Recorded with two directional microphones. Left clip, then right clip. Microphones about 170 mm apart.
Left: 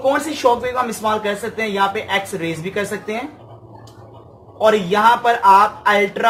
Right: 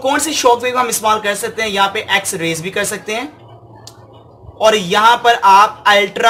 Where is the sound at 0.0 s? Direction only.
35° right (ahead or behind).